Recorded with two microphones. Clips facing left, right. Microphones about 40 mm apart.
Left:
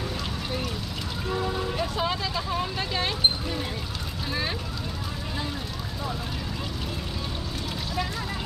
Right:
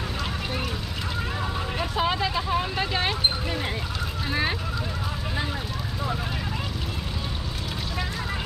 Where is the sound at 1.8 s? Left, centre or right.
Centre.